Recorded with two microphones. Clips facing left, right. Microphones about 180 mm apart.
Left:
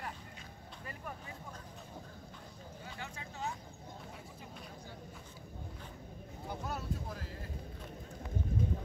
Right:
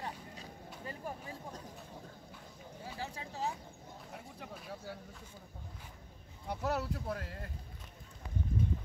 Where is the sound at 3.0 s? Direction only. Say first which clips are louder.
Right 4 dB; 35° right (ahead or behind).